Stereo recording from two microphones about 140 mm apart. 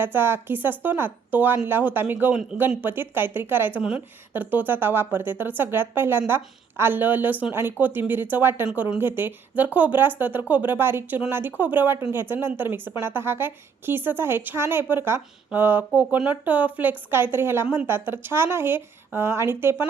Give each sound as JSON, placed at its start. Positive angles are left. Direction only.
{"t": 0.0, "sound": "speech", "side_deg": -15}